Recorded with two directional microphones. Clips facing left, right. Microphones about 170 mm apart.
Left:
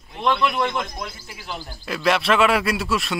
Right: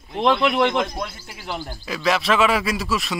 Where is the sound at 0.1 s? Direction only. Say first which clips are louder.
Right 3 dB; 65° right (ahead or behind).